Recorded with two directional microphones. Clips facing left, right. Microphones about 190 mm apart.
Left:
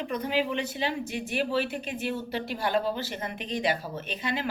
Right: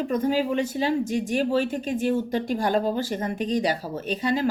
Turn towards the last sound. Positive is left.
turn(degrees=-40)  # may be behind; listen again after turning